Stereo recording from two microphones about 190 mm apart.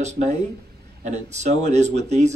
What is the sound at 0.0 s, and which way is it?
Speech, 35° right (ahead or behind).